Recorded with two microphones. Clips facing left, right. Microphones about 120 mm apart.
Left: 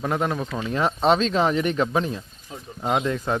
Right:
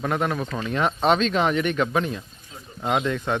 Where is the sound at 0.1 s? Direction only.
25° left (ahead or behind).